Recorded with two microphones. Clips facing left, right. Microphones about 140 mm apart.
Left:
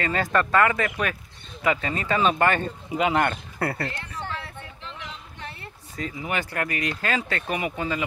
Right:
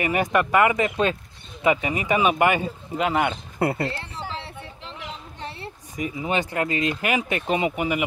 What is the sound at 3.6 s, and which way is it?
Speech, 20° right (ahead or behind).